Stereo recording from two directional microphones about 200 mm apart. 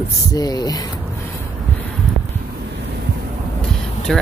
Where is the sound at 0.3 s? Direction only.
20° left (ahead or behind).